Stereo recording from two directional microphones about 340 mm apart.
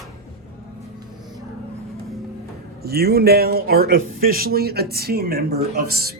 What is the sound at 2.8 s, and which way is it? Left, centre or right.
Speech, right.